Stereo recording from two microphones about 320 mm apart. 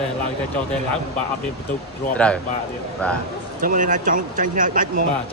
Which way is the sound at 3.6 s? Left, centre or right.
Right.